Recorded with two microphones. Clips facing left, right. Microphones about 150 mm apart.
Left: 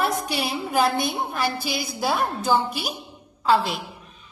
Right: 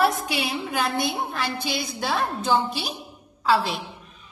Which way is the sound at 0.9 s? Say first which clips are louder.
Left 1 dB; 20° left (ahead or behind).